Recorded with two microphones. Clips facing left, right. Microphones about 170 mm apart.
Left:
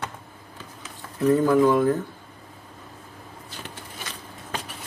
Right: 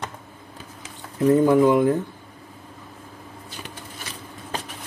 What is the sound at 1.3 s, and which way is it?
Speech, 20° right (ahead or behind).